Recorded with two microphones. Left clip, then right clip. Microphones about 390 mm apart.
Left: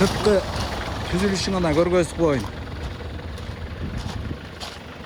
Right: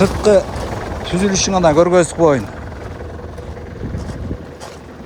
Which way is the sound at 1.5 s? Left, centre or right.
Right.